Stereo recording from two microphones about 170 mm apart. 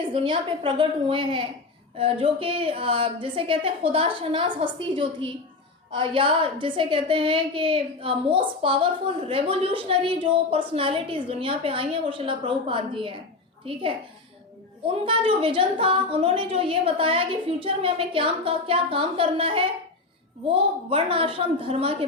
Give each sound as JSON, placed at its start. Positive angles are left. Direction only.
{"t": 0.1, "sound": "a woman's voice", "side_deg": -30}
{"t": 14.8, "sound": "a woman's voice", "side_deg": -30}